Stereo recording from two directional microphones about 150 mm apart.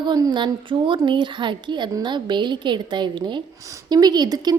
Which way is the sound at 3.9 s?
25° right (ahead or behind).